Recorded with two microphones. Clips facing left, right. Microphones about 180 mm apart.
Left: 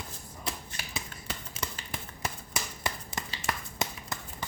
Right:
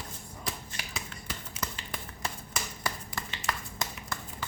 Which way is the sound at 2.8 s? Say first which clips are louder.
Left 1 dB; 25° left (ahead or behind).